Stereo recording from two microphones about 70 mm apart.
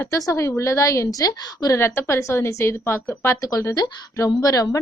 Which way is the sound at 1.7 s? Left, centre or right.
Left.